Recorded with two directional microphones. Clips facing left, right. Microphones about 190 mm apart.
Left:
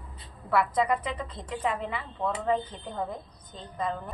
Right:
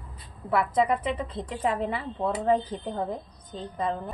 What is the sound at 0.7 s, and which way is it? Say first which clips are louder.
A woman's voice: right 3 dB; 25° right (ahead or behind).